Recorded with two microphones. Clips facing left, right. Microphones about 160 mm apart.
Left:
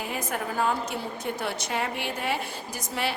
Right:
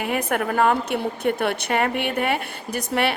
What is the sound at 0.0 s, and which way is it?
A woman's voice, 65° right (ahead or behind).